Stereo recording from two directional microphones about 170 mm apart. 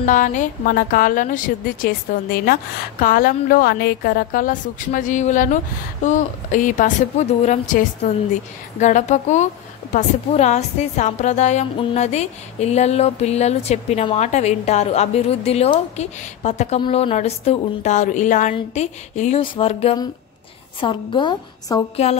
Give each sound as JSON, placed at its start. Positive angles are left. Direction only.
{"t": 0.0, "sound": "a woman's voice", "side_deg": 50}
{"t": 19.4, "sound": "a woman's voice", "side_deg": 30}
{"t": 21.9, "sound": "a woman's voice", "side_deg": 40}